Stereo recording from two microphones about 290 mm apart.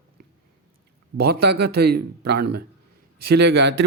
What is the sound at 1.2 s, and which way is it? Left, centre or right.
A man's voice, right.